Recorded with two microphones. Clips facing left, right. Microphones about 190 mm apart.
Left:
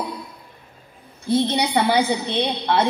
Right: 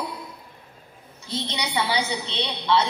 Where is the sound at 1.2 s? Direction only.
55° left (ahead or behind).